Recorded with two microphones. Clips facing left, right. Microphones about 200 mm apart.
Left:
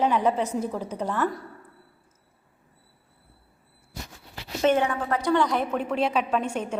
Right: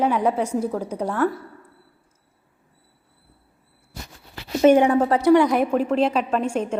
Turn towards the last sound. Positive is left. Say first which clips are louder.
# right 4 dB
turn(degrees=5)  # may be behind; listen again after turning